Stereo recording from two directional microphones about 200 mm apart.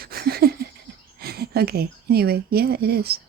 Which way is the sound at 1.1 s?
50° right (ahead or behind).